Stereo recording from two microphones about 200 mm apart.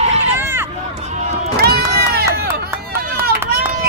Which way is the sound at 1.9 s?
50° right (ahead or behind).